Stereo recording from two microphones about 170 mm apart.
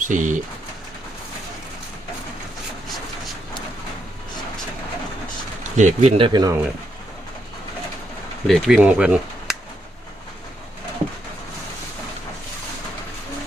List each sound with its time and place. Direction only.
0.0 s speech: 50° right (ahead or behind)
5.7 s speech: 45° right (ahead or behind); by 6.6 s 25° right (ahead or behind)
8.4 s speech: centre (ahead or behind)